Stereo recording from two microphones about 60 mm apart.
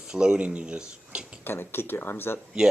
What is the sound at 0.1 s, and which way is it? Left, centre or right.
Speech, centre.